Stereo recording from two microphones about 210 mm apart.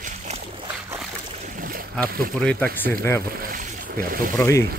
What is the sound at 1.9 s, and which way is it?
Speech, 5° left (ahead or behind).